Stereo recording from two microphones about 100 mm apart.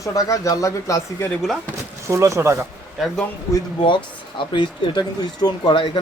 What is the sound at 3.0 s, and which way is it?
Speech, 5° right (ahead or behind).